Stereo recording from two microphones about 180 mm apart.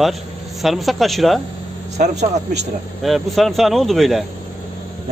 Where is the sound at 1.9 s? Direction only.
40° right (ahead or behind).